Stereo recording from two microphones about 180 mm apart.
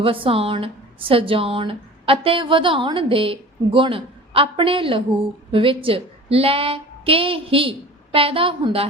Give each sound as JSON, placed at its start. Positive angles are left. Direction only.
{"t": 0.0, "sound": "a woman's voice", "side_deg": -30}